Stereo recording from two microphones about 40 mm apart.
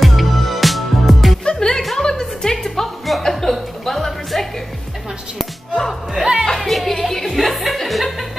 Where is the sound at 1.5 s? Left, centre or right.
Centre.